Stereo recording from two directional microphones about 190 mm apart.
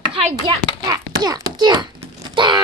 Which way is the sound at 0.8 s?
20° right (ahead or behind).